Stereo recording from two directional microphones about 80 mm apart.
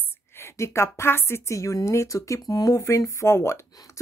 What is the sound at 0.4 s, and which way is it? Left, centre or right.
Speech, left.